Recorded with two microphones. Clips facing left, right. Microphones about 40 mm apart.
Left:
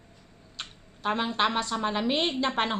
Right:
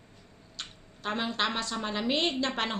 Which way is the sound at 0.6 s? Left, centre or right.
Centre.